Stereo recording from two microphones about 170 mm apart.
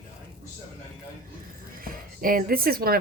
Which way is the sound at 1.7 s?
55° right (ahead or behind).